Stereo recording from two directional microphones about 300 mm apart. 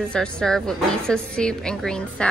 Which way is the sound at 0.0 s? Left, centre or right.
Centre.